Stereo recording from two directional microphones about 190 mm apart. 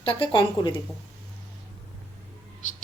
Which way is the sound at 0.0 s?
25° left (ahead or behind).